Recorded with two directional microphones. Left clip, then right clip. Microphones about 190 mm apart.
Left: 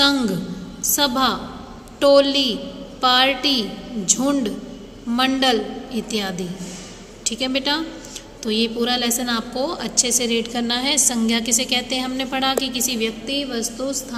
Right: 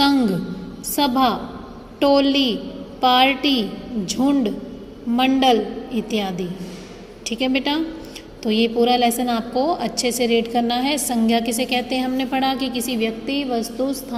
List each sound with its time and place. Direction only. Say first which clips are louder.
0.0 s a woman's voice: even; 15° right (ahead or behind)